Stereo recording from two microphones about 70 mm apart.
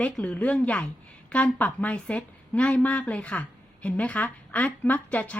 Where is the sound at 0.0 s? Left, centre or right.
Centre.